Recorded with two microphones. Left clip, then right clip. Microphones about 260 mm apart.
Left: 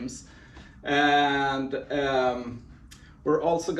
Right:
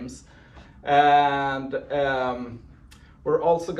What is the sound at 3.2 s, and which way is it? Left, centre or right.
Speech, centre.